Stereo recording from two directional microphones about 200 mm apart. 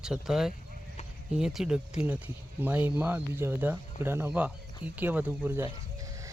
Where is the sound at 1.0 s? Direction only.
35° left (ahead or behind).